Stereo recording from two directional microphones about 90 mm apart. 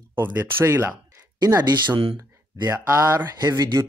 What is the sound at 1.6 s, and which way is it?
Speech, 55° right (ahead or behind).